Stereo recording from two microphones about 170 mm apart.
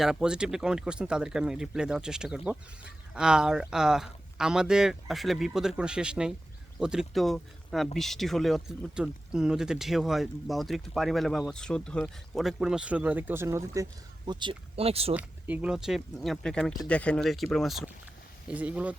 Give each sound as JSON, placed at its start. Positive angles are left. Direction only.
{"t": 0.0, "sound": "speech", "side_deg": -5}
{"t": 14.3, "sound": "speech", "side_deg": -25}
{"t": 15.1, "sound": "speech", "side_deg": -10}